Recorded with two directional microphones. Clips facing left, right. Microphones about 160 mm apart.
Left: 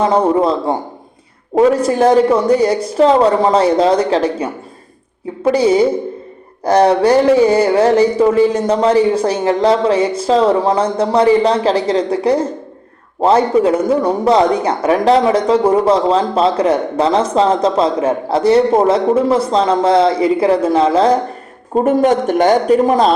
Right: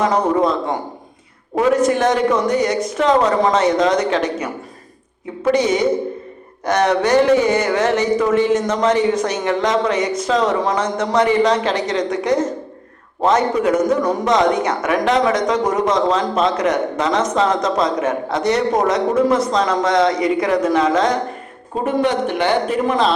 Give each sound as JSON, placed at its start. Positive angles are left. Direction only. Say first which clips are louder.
{"t": 0.0, "sound": "a man's voice", "louder": "left 3 dB", "side_deg": 30}
{"t": 21.8, "sound": "a man's voice", "louder": "left 4 dB", "side_deg": 45}